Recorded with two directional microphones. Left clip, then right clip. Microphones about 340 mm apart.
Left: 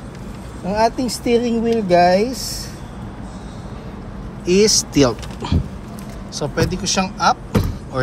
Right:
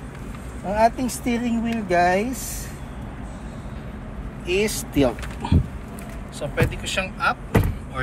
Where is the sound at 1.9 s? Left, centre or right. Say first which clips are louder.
Left 5 dB; centre.